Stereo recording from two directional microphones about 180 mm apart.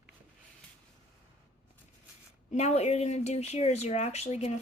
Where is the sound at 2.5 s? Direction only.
40° left (ahead or behind).